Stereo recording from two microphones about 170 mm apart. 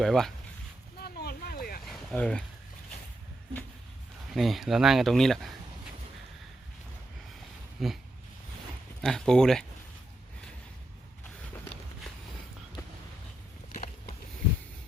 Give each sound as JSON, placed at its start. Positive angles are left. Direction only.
{"t": 0.0, "sound": "speech", "side_deg": 0}
{"t": 0.9, "sound": "vehicle", "side_deg": 70}
{"t": 1.8, "sound": "a sound", "side_deg": 0}
{"t": 4.4, "sound": "speech", "side_deg": 0}
{"t": 7.8, "sound": "speech", "side_deg": 0}
{"t": 9.0, "sound": "speech", "side_deg": 0}